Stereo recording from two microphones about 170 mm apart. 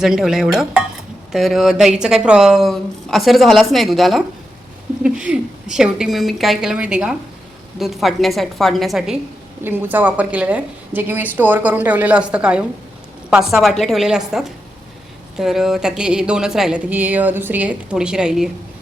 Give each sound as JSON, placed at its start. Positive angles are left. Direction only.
{"t": 0.0, "sound": "speech", "side_deg": 0}
{"t": 9.6, "sound": "a woman's voice", "side_deg": -10}
{"t": 15.4, "sound": "speech", "side_deg": 0}